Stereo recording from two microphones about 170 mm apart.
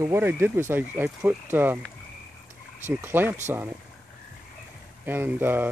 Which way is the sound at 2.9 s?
10° right (ahead or behind).